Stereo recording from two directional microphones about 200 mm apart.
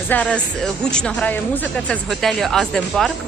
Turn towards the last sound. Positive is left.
turn(degrees=0)  # may be behind; listen again after turning